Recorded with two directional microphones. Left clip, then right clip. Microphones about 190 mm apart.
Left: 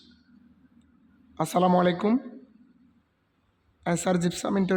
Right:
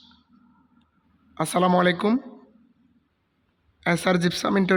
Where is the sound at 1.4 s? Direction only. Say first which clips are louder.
Right 2 dB; 5° right (ahead or behind).